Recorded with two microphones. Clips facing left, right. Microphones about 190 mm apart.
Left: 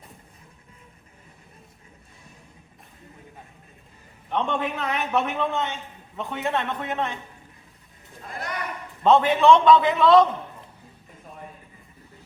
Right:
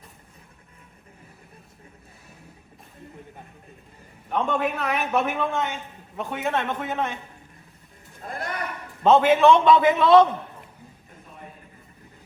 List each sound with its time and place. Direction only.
4.3 s a man's voice: 5° right (ahead or behind)
8.3 s a sound: 50° right (ahead or behind)
9.2 s a man's voice: centre (ahead or behind)